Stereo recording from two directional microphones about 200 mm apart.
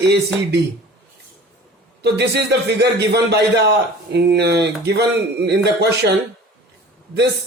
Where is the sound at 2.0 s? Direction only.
55° right (ahead or behind).